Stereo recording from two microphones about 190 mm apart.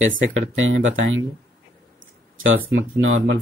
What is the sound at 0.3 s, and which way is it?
Speech, 90° right.